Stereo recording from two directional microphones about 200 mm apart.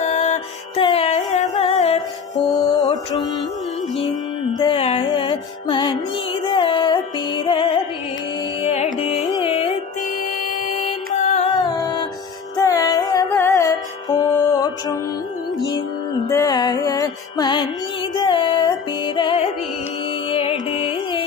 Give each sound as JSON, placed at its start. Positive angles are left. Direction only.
{"t": 0.0, "sound": "music", "side_deg": 35}
{"t": 2.5, "sound": "music", "side_deg": 20}
{"t": 4.6, "sound": "music", "side_deg": 25}
{"t": 9.3, "sound": "music", "side_deg": 30}
{"t": 11.1, "sound": "music", "side_deg": 35}
{"t": 11.5, "sound": "music", "side_deg": 20}
{"t": 16.3, "sound": "music", "side_deg": 20}